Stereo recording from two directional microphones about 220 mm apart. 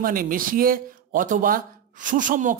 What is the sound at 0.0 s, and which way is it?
Speech, 40° right (ahead or behind).